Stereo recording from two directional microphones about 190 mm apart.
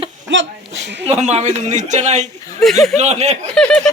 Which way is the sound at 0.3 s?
70° right (ahead or behind).